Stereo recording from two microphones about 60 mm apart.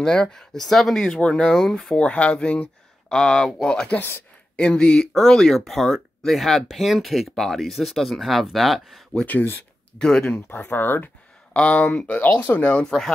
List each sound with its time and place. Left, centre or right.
0.0 s speech: centre
3.1 s speech: centre
9.2 s speech: left
9.9 s speech: centre
10.5 s speech: left
11.5 s speech: left
12.8 s speech: centre